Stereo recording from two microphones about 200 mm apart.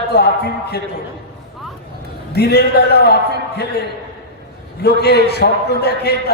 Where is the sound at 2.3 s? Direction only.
55° left (ahead or behind).